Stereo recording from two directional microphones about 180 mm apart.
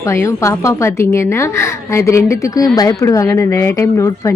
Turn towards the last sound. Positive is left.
turn(degrees=15)  # may be behind; listen again after turning